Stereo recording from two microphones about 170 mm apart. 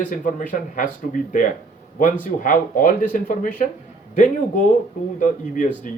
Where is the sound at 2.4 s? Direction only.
50° left (ahead or behind).